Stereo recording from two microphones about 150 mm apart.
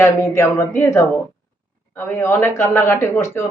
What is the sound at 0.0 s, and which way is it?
A man's voice, 20° left (ahead or behind).